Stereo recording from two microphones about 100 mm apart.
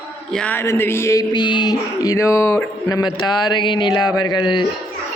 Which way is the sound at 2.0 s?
30° left (ahead or behind).